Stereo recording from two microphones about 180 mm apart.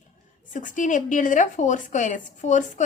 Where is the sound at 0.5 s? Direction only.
45° left (ahead or behind).